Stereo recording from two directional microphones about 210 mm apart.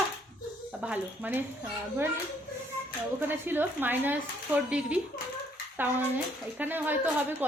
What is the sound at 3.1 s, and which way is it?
Speech, 10° right (ahead or behind).